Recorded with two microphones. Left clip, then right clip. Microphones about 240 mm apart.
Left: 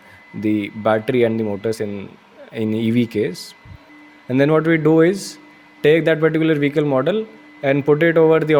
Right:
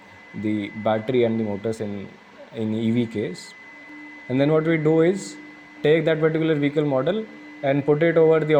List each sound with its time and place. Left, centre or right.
0.4 s a man's voice: left
4.3 s a man's voice: left
5.1 s speech: left
5.8 s a man's voice: left